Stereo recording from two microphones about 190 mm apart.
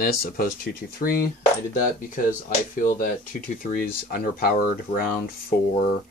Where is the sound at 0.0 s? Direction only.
50° left (ahead or behind).